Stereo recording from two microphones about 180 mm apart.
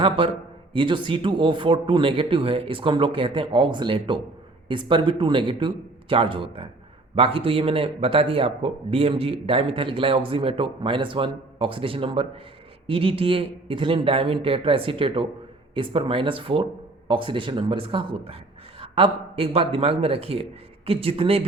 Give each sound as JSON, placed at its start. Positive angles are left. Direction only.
{"t": 0.7, "sound": "speech", "side_deg": -30}